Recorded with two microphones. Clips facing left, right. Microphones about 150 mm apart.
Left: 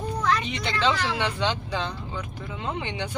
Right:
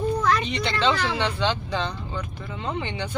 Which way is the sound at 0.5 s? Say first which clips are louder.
Right 2 dB; 10° left (ahead or behind).